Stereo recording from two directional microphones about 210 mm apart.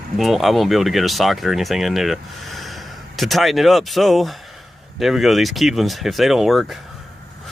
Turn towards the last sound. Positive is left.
turn(degrees=0)  # may be behind; listen again after turning